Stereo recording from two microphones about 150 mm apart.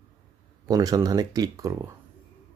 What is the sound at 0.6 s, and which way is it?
Speech, 25° right (ahead or behind).